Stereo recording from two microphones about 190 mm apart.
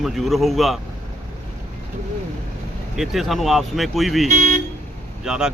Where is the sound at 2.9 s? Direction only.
Centre (ahead or behind).